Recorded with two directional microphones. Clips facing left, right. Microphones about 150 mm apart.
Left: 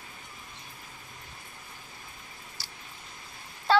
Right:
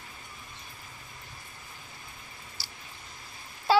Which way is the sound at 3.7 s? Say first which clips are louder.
Even; 5° right (ahead or behind).